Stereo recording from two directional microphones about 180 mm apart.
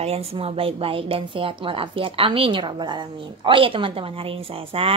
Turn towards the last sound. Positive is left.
turn(degrees=-30)  # may be behind; listen again after turning